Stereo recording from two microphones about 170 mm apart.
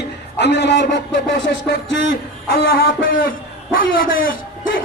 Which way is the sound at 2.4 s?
65° left (ahead or behind).